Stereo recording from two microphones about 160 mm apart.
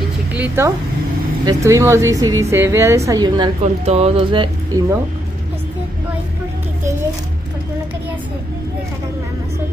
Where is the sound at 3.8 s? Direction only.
40° right (ahead or behind).